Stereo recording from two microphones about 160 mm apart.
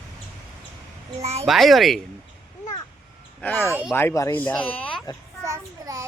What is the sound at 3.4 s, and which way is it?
Speech, 10° left (ahead or behind).